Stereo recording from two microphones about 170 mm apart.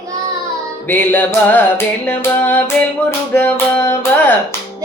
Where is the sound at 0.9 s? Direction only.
10° left (ahead or behind).